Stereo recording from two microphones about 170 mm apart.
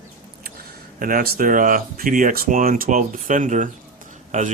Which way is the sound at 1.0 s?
60° right (ahead or behind).